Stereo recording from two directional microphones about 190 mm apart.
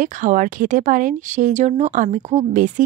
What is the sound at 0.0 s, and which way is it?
Speech, 45° right (ahead or behind).